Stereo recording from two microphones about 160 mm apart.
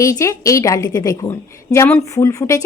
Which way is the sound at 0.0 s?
20° left (ahead or behind).